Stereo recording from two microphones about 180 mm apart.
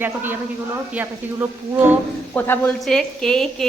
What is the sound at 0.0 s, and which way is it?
A woman's voice, 10° right (ahead or behind).